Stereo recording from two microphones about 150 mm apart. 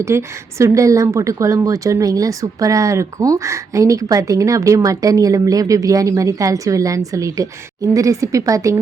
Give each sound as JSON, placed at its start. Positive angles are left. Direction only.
{"t": 0.0, "sound": "a woman's voice", "side_deg": -20}